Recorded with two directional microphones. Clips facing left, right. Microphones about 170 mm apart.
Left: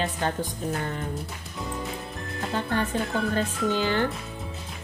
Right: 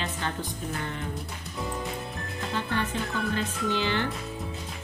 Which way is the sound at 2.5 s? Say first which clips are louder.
Left 3 dB; 45° left (ahead or behind).